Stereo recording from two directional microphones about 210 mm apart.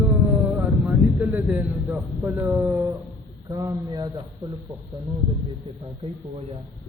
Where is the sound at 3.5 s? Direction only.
15° right (ahead or behind).